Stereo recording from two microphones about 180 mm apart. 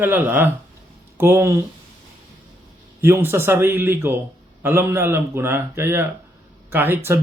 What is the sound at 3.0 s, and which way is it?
A man's voice, 15° right (ahead or behind).